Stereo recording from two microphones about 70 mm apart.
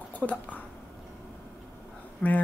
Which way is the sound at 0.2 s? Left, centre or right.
Left.